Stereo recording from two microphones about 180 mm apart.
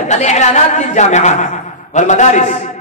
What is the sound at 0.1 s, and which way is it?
A man's voice, 40° left (ahead or behind).